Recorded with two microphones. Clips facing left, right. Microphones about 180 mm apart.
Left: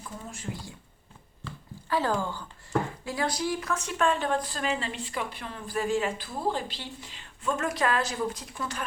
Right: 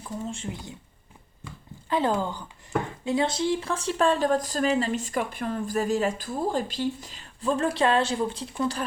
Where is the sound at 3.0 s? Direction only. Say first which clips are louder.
Right 5 dB; 25° right (ahead or behind).